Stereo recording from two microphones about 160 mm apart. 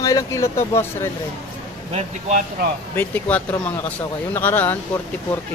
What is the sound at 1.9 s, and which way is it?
Speech, 50° right (ahead or behind).